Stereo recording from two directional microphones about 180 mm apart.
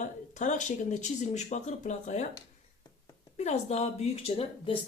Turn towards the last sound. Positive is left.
turn(degrees=30)  # may be behind; listen again after turning